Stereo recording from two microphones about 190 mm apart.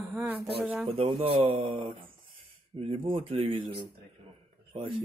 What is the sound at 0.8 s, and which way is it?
Speech, 30° right (ahead or behind).